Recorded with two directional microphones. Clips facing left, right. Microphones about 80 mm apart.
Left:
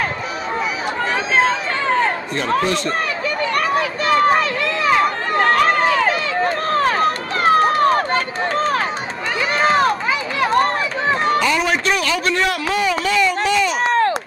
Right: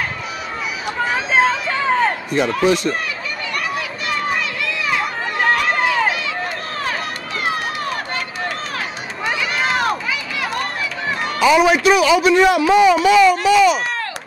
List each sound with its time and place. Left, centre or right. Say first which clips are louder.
1.1 s a sound: right 1 dB; centre
2.6 s a man's voice: right 4 dB; centre
3.5 s run: left 4 dB; left
5.8 s run: left 2 dB; centre
6.4 s run: left 7 dB; left
9.4 s run: left 6 dB; left
11.3 s a man's voice: right 4 dB; centre
13.8 s chop: left 9 dB; left